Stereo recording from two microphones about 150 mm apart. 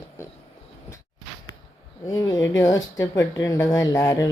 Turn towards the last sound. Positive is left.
turn(degrees=20)  # may be behind; listen again after turning